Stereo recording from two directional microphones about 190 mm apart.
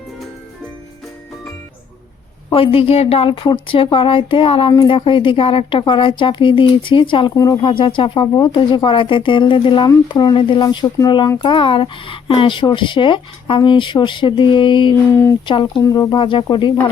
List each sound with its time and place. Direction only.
2.5 s speech: 30° left (ahead or behind)